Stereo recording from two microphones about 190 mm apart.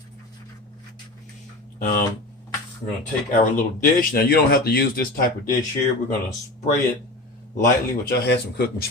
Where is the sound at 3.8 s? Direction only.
50° left (ahead or behind).